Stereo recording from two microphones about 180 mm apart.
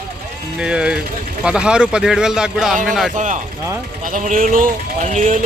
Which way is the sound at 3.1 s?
45° right (ahead or behind).